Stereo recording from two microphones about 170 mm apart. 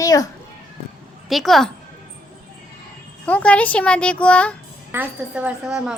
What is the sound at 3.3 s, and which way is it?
A child's voice, 5° left (ahead or behind).